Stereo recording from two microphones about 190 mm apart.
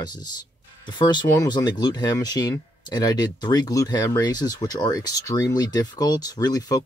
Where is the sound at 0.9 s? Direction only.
25° left (ahead or behind).